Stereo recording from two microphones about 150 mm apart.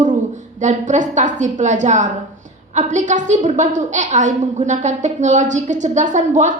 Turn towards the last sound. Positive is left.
turn(degrees=-55)  # may be behind; listen again after turning